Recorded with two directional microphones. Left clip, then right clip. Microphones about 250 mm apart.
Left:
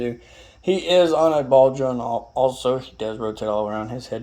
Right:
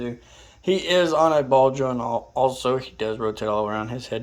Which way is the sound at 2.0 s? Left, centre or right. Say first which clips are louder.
Left 1 dB; right.